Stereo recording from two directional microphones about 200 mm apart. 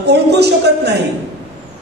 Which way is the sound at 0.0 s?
55° right (ahead or behind).